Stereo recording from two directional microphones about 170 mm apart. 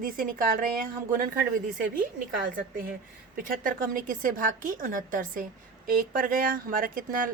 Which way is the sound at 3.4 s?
55° right (ahead or behind).